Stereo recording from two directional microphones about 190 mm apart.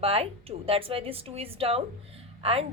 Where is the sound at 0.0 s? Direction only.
30° right (ahead or behind).